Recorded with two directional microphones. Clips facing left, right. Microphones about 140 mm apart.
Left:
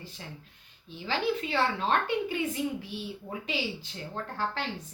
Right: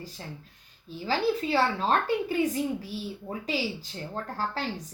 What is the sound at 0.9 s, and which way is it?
A woman's voice, 40° right (ahead or behind).